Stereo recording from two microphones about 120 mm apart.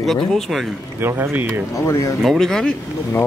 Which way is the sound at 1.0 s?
15° right (ahead or behind).